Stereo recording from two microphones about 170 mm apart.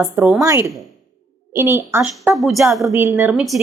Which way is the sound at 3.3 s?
Centre (ahead or behind).